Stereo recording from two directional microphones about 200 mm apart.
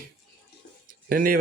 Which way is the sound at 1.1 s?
45° right (ahead or behind).